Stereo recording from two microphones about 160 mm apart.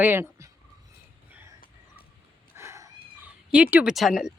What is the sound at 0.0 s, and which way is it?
Speech, 15° right (ahead or behind).